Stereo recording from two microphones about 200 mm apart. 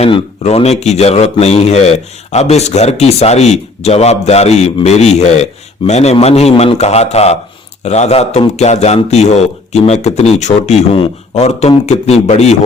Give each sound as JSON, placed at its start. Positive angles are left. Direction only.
{"t": 0.0, "sound": "a man's voice", "side_deg": 30}